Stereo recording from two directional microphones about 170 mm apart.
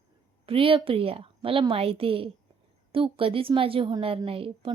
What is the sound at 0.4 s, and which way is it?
A woman's voice, 30° right (ahead or behind).